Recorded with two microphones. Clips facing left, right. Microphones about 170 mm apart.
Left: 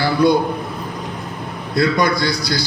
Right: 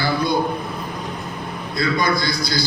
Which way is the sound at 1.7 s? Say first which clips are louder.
Left 4 dB; 65° left (ahead or behind).